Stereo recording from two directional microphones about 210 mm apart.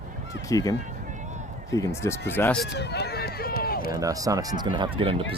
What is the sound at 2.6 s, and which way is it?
Run, 55° left (ahead or behind).